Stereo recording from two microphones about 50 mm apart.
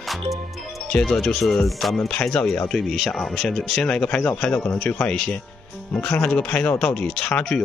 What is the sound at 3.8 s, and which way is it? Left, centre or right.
Speech, left.